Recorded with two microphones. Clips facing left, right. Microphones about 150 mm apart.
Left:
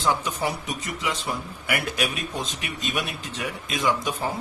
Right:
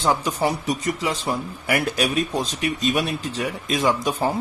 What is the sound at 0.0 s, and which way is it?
Speech, 35° right (ahead or behind).